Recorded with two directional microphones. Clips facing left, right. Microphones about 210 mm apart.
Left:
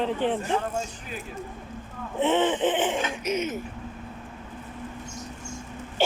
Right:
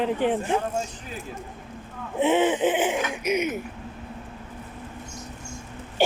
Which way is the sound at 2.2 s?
10° right (ahead or behind).